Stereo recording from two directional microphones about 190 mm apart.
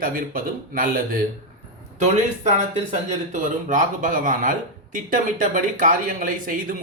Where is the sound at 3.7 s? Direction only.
45° right (ahead or behind).